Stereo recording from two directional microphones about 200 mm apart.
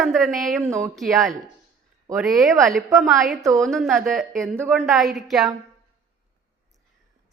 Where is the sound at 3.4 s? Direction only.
15° right (ahead or behind).